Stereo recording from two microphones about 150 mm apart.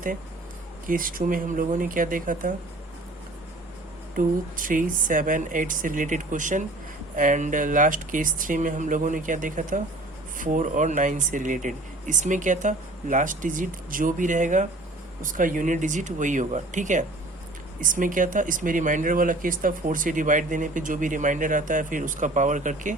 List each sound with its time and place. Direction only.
0.9 s speech: 65° right (ahead or behind)
4.1 s speech: 65° right (ahead or behind)